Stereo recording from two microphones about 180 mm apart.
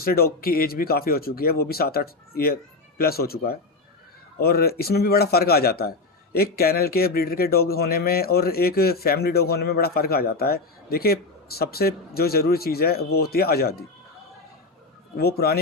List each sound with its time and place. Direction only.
0.0 s a man's voice: 55° left (ahead or behind)
15.2 s a man's voice: 60° left (ahead or behind)